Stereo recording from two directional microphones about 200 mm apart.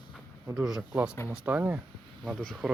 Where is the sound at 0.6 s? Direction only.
5° right (ahead or behind).